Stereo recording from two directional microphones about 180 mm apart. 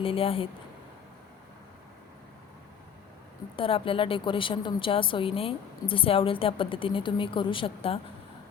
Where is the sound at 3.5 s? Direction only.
30° left (ahead or behind).